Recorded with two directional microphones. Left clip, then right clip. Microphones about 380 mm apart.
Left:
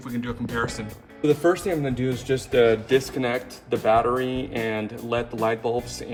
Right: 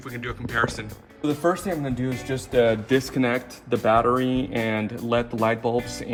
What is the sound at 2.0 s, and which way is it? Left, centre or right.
Speech, centre.